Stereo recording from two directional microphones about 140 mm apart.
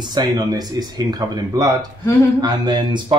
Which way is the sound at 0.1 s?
30° right (ahead or behind).